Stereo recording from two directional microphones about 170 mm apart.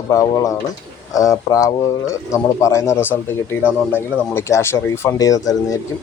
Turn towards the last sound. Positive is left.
turn(degrees=20)  # may be behind; listen again after turning